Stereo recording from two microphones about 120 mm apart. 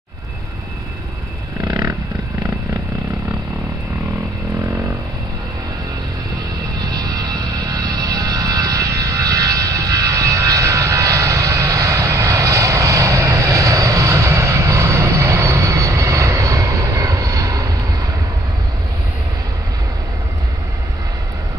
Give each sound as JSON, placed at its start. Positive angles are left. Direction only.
{"t": 1.7, "sound": "roaring cats", "side_deg": -30}
{"t": 6.8, "sound": "music", "side_deg": -30}